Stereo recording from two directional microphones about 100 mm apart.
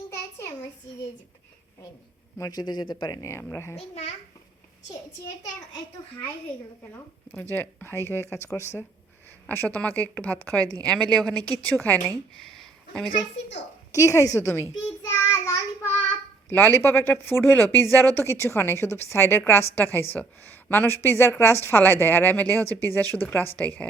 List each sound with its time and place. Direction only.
0.1 s a sound: 25° left (ahead or behind)
2.4 s speech: 40° left (ahead or behind)
3.3 s speech: 25° left (ahead or behind)
3.8 s a child's voice: 90° left
7.3 s a woman's voice: 20° left (ahead or behind)
12.4 s a sound: 5° left (ahead or behind)
13.9 s a child's voice: 30° left (ahead or behind)
16.5 s a woman's voice: 20° left (ahead or behind)